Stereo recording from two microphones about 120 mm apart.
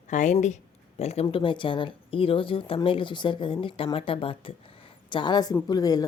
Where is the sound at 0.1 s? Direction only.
90° left.